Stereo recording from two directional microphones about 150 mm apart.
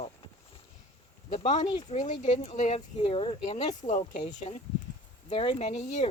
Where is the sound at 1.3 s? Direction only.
55° left (ahead or behind); by 3.3 s 35° left (ahead or behind).